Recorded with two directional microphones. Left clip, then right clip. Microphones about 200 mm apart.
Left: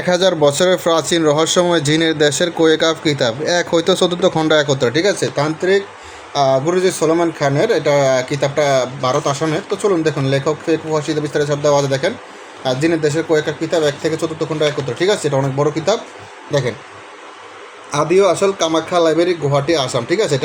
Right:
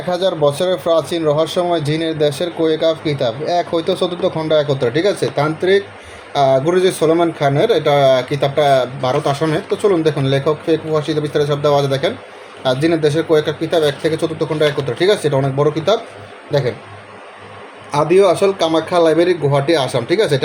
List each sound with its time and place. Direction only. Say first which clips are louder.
0.1 s a man's voice: left 2 dB; 30° left (ahead or behind); by 16.7 s 5° left (ahead or behind)
17.9 s speech: right 1 dB; centre (ahead or behind)